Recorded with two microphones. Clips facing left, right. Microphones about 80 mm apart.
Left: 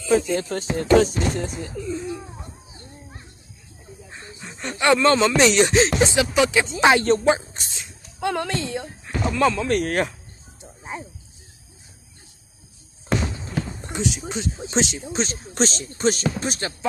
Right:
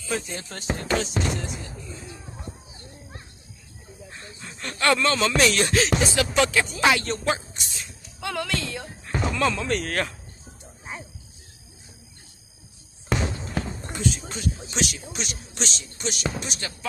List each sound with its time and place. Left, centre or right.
0.3 s speech: left
4.1 s a sound: centre
5.0 s speech: left
5.9 s speech: left
6.3 s speech: centre
9.0 s speech: centre
10.6 s a sound: left
13.7 s speech: centre
15.1 s speech: left